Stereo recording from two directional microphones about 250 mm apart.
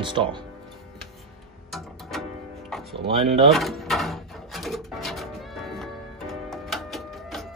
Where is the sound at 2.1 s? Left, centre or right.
Centre.